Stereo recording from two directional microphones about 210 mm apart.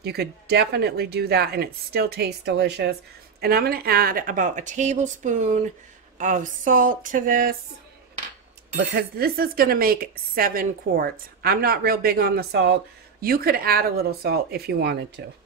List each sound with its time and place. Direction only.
0.0 s speech: 50° right (ahead or behind)
6.1 s a sound: 35° right (ahead or behind)
8.7 s speech: 45° right (ahead or behind)